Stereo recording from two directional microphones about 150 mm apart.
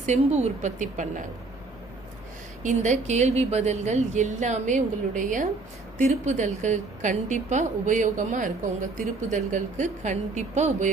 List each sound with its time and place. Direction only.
0.0 s a woman's voice: 50° right (ahead or behind)
2.6 s a woman's voice: 50° right (ahead or behind)